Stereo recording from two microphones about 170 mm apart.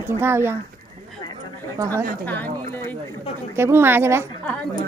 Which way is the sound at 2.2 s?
10° left (ahead or behind).